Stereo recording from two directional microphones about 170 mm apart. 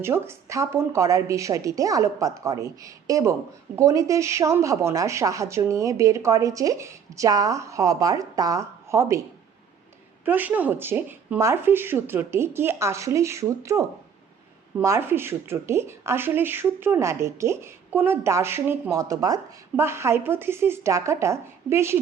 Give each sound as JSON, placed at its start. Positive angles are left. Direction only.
{"t": 0.0, "sound": "speech", "side_deg": -15}
{"t": 10.2, "sound": "speech", "side_deg": -10}